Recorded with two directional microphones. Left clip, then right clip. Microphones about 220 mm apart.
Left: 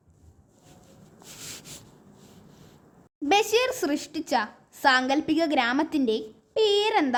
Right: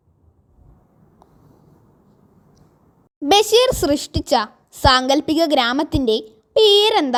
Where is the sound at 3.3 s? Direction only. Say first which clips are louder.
Right 9 dB; 25° right (ahead or behind).